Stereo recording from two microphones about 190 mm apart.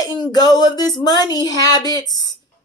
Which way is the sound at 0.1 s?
20° left (ahead or behind).